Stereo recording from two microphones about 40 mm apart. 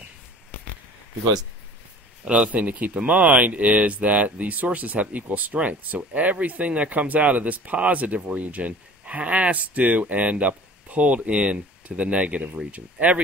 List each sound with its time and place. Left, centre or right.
2.2 s speech: right